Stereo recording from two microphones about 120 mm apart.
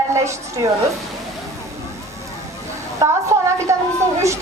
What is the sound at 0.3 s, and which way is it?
Speech, 25° right (ahead or behind).